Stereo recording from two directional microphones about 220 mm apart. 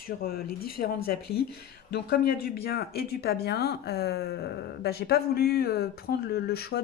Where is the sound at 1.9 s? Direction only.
45° left (ahead or behind).